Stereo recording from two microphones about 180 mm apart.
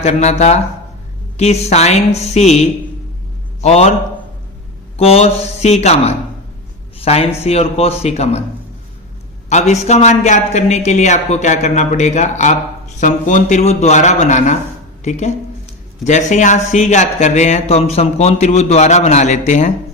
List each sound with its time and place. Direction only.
0.0 s speech: 40° left (ahead or behind)
4.9 s speech: 35° left (ahead or behind)
9.5 s a man's voice: 40° left (ahead or behind)